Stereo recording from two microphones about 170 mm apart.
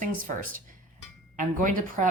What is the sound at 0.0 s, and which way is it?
Speech, 50° right (ahead or behind).